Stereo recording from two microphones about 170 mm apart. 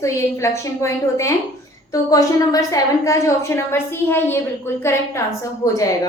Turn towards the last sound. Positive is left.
turn(degrees=20)  # may be behind; listen again after turning